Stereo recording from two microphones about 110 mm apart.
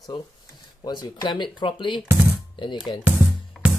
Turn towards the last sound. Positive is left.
turn(degrees=0)  # may be behind; listen again after turning